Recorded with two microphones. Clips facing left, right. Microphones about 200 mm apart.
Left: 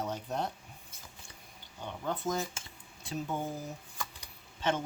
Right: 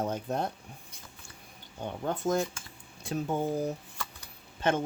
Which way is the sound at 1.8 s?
50° right (ahead or behind).